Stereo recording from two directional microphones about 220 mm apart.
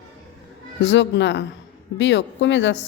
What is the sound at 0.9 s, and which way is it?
A woman's voice, 55° left (ahead or behind).